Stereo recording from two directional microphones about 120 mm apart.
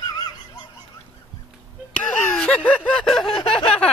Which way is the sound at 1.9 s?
10° left (ahead or behind).